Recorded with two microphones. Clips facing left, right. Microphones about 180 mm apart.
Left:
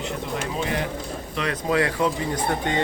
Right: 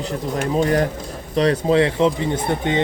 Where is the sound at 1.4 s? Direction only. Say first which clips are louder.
Right 7 dB; 30° right (ahead or behind).